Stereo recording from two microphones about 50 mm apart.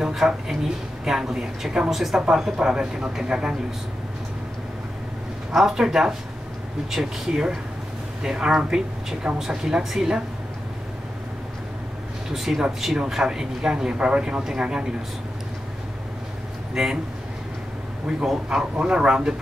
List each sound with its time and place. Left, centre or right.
0.0 s a woman's voice: centre
2.2 s speech: centre
5.5 s speech: centre
12.3 s speech: centre
16.7 s speech: centre
18.0 s speech: centre